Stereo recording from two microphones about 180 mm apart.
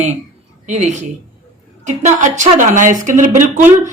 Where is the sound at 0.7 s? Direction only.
40° right (ahead or behind).